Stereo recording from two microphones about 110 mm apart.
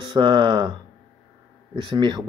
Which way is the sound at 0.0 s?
45° right (ahead or behind).